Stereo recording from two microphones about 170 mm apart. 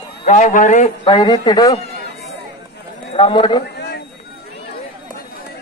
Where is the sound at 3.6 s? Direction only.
80° left.